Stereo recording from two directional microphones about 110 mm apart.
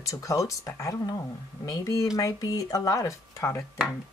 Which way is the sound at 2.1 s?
30° left (ahead or behind).